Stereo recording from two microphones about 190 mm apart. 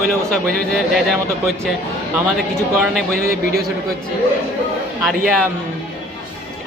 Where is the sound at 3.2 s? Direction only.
50° right (ahead or behind).